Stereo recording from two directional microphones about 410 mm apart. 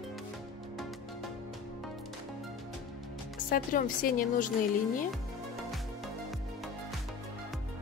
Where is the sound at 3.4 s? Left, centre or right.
Centre.